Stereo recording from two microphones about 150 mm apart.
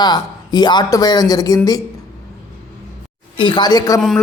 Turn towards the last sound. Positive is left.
turn(degrees=25)  # may be behind; listen again after turning